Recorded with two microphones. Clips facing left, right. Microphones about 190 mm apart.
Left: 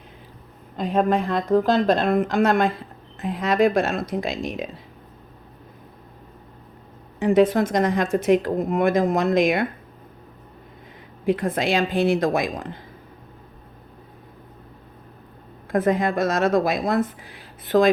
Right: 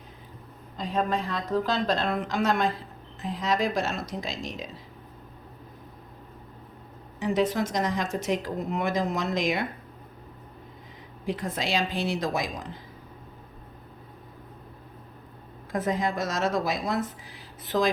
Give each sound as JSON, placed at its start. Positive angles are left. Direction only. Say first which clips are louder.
{"t": 0.8, "sound": "a woman's voice", "louder": "left 7 dB", "side_deg": 55}
{"t": 7.2, "sound": "a woman's voice", "louder": "left 8 dB", "side_deg": 55}
{"t": 11.3, "sound": "a woman's voice", "louder": "left 8 dB", "side_deg": 55}
{"t": 15.7, "sound": "a woman's voice", "louder": "left 7 dB", "side_deg": 55}